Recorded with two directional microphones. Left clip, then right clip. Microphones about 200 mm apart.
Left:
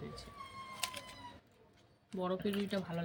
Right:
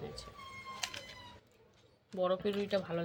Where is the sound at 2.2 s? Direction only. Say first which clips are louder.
Right 5 dB; 50° right (ahead or behind).